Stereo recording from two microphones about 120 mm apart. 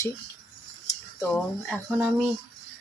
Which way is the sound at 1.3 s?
10° left (ahead or behind).